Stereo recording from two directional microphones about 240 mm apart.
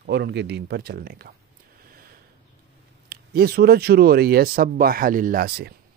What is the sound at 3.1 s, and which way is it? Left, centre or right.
Speech, right.